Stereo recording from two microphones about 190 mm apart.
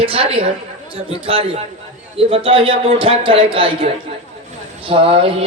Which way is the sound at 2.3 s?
30° right (ahead or behind).